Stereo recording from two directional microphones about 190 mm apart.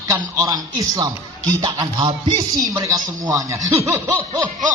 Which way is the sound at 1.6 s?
20° right (ahead or behind).